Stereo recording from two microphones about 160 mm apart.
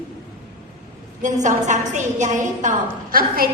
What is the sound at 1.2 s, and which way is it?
A woman's voice, 50° right (ahead or behind).